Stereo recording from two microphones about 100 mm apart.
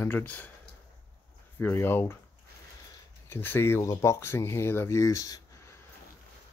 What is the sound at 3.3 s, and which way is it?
Speech, 20° left (ahead or behind).